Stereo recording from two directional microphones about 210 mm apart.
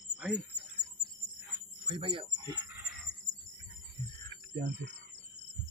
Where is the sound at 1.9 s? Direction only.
25° right (ahead or behind).